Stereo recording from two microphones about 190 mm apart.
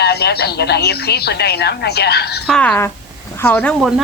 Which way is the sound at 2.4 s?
5° left (ahead or behind).